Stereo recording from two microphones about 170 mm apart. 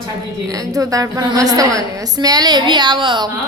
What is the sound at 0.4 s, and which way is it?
A woman's voice, 20° right (ahead or behind).